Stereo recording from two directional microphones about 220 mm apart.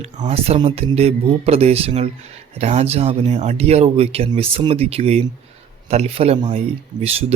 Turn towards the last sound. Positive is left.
turn(degrees=-30)  # may be behind; listen again after turning